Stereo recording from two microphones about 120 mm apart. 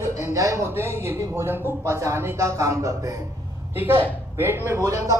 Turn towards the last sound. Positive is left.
turn(degrees=-25)  # may be behind; listen again after turning